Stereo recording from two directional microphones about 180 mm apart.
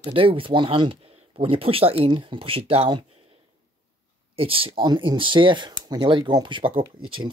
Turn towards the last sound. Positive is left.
turn(degrees=-25)  # may be behind; listen again after turning